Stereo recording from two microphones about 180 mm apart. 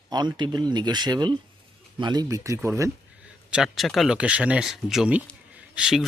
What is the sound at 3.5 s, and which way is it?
Speech, centre (ahead or behind).